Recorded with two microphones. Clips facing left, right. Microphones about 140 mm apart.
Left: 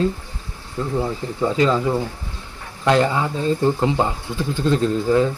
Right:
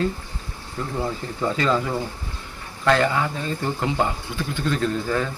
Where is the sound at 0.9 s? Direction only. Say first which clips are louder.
Left 4 dB; 15° left (ahead or behind).